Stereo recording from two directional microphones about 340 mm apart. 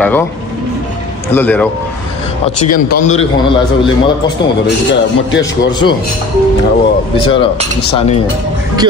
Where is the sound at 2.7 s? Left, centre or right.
Left.